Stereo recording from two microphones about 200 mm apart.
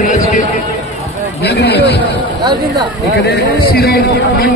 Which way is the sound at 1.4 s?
55° left (ahead or behind).